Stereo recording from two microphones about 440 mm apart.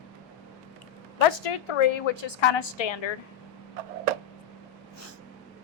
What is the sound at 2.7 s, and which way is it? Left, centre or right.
Speech, left.